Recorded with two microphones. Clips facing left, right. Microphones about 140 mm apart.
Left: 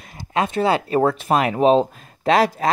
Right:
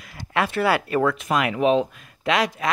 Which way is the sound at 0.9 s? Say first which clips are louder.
Left 3 dB; 35° left (ahead or behind).